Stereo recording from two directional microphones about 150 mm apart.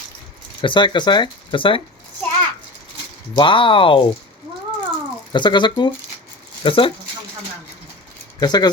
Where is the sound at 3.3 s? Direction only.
30° left (ahead or behind).